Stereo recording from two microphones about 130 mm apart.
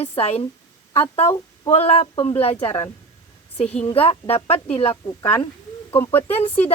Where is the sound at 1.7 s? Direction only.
50° left (ahead or behind).